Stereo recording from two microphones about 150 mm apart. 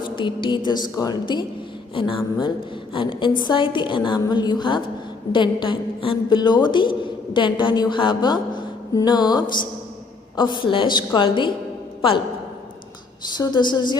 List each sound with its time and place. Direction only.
0.2 s a woman's voice: 30° left (ahead or behind)
13.3 s a woman's voice: 30° left (ahead or behind)